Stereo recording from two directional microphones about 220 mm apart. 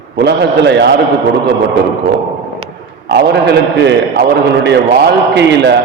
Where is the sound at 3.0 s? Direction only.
50° right (ahead or behind).